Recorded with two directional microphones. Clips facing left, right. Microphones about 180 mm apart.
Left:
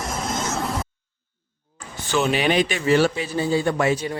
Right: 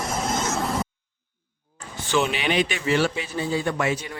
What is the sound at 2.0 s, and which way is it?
A man's voice, 40° left (ahead or behind).